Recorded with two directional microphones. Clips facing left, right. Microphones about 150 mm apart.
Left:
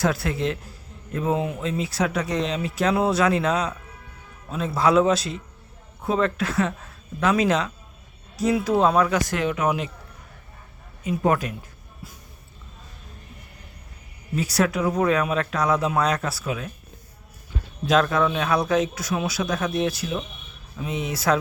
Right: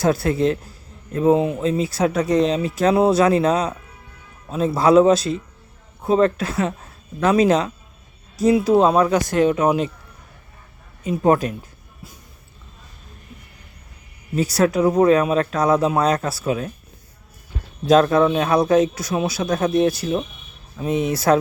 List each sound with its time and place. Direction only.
0.0 s speech: 35° right (ahead or behind)
1.2 s speech: 25° right (ahead or behind)
11.0 s speech: 35° right (ahead or behind)
14.3 s speech: 35° right (ahead or behind)
17.8 s speech: 35° right (ahead or behind)
20.8 s speech: 45° right (ahead or behind)